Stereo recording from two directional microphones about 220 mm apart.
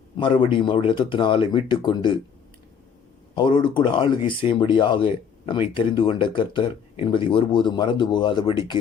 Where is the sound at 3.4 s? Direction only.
20° left (ahead or behind).